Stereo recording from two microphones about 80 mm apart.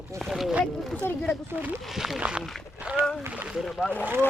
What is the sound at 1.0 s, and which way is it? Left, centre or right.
Speech, left.